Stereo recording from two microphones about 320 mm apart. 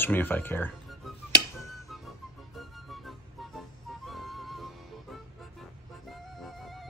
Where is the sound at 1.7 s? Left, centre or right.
Centre.